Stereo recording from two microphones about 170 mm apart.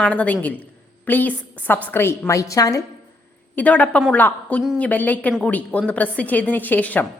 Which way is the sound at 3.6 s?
10° left (ahead or behind).